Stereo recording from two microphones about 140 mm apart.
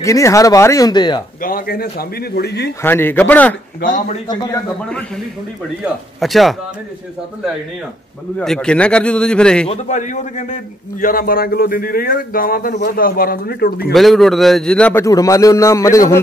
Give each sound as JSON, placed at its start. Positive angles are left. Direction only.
{"t": 0.0, "sound": "speech", "side_deg": 20}
{"t": 1.4, "sound": "a man's voice", "side_deg": 90}
{"t": 2.8, "sound": "a man's voice", "side_deg": 15}
{"t": 4.8, "sound": "a man's voice", "side_deg": 5}
{"t": 8.4, "sound": "a man's voice", "side_deg": 5}
{"t": 9.7, "sound": "a man's voice", "side_deg": 60}
{"t": 13.9, "sound": "a man's voice", "side_deg": 0}
{"t": 15.0, "sound": "speech", "side_deg": 25}